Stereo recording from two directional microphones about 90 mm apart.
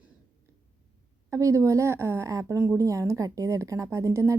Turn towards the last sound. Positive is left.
turn(degrees=-35)  # may be behind; listen again after turning